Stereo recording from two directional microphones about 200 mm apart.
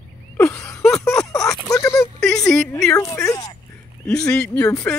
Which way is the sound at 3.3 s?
20° left (ahead or behind).